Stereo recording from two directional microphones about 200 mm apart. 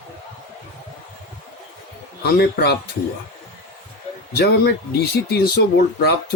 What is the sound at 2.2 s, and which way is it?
Speech, 55° left (ahead or behind).